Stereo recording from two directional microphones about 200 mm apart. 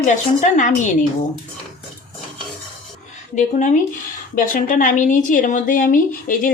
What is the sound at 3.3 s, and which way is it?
A woman's voice, 40° left (ahead or behind).